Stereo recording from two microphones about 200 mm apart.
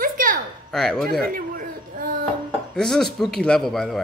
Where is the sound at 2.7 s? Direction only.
5° left (ahead or behind).